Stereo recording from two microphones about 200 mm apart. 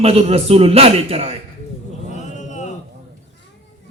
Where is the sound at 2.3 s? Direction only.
35° left (ahead or behind).